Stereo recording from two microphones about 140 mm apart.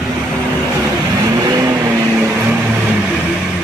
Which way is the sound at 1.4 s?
25° right (ahead or behind).